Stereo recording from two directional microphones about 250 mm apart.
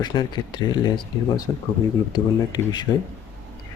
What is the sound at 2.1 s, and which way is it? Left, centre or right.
Speech, centre.